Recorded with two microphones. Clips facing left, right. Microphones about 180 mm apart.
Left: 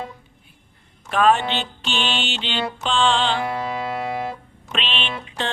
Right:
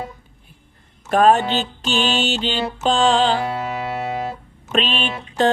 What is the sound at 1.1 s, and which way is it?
Mantra, 40° right (ahead or behind).